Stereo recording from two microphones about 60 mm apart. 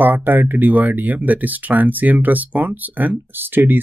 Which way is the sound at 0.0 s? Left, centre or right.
Right.